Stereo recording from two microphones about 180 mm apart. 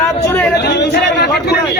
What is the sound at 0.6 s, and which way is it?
Speech, 65° left (ahead or behind).